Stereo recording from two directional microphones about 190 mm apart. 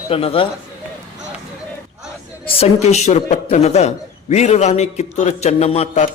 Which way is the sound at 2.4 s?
30° left (ahead or behind).